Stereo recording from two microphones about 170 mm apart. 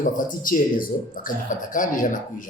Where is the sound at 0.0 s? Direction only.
50° left (ahead or behind).